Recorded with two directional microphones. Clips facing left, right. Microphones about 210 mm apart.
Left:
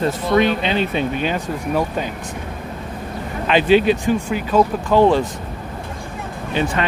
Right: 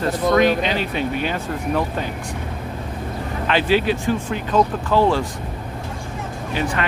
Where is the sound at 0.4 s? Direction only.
25° left (ahead or behind).